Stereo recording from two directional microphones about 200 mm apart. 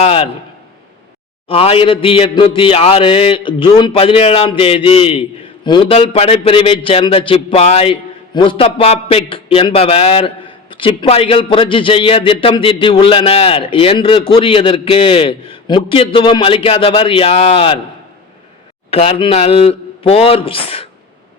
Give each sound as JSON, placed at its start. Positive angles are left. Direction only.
{"t": 0.0, "sound": "a sound", "side_deg": 30}
{"t": 1.5, "sound": "a man's voice", "side_deg": 30}
{"t": 18.9, "sound": "a man's voice", "side_deg": 30}